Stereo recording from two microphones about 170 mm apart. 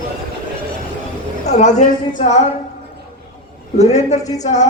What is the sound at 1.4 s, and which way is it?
Speech, 40° left (ahead or behind).